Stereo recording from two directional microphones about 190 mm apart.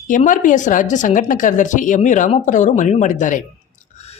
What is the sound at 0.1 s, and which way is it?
Speech, 45° left (ahead or behind).